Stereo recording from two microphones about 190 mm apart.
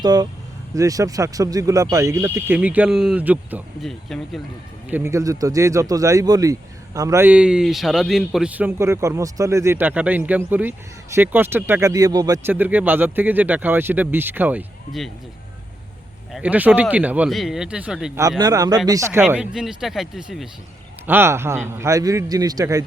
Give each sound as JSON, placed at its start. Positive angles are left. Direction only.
{"t": 0.0, "sound": "speech", "side_deg": -20}
{"t": 4.9, "sound": "speech", "side_deg": -10}
{"t": 16.3, "sound": "speech", "side_deg": -5}
{"t": 18.2, "sound": "speech", "side_deg": -20}
{"t": 19.2, "sound": "speech", "side_deg": -5}
{"t": 21.1, "sound": "speech", "side_deg": -10}